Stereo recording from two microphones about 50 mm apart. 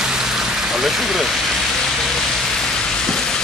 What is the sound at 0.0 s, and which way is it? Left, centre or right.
Rain on surface, centre.